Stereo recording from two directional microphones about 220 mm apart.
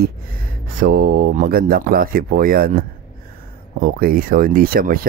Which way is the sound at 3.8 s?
40° right (ahead or behind).